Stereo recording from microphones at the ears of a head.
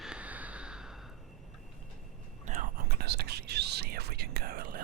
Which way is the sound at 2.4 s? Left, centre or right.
Right.